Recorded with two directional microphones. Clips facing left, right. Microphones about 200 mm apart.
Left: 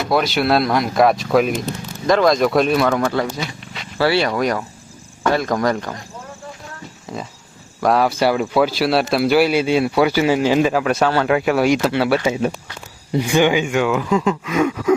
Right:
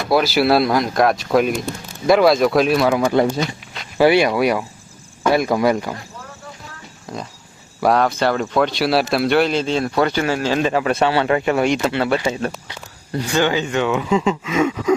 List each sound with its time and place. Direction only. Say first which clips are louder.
0.1 s speech: right 2 dB; 5° right (ahead or behind)
3.2 s speech: right 5 dB; 30° right (ahead or behind)
3.9 s speech: right 3 dB; 15° right (ahead or behind)
7.1 s speech: even; centre (ahead or behind)
10.7 s speech: even; centre (ahead or behind)